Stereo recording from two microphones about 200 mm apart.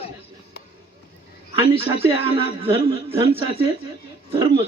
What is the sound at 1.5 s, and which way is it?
A man's voice, 30° right (ahead or behind).